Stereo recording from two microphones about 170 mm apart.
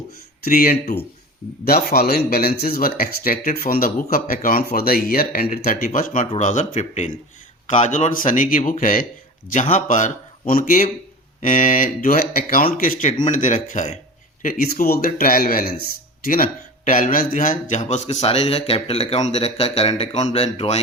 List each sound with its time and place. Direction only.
0.4 s speech: 60° left (ahead or behind); by 20.7 s 35° left (ahead or behind)